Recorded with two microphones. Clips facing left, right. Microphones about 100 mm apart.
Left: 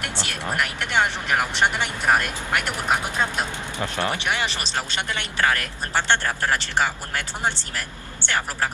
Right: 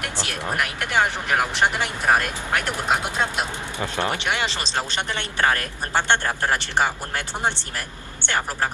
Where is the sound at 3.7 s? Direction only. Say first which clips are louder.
Right 1 dB; 20° right (ahead or behind).